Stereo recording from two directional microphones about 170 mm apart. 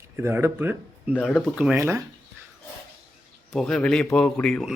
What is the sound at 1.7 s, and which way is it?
Speech, 15° right (ahead or behind).